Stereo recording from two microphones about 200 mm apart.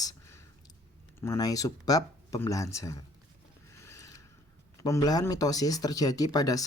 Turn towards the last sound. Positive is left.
turn(degrees=20)  # may be behind; listen again after turning